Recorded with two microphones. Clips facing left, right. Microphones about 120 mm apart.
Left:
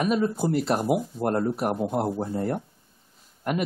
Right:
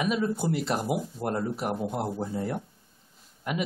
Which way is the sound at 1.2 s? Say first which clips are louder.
Left 5 dB; 50° left (ahead or behind).